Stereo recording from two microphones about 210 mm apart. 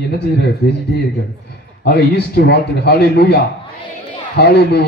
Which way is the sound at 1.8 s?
50° left (ahead or behind).